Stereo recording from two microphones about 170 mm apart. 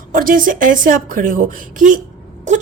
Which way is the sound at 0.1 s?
50° right (ahead or behind).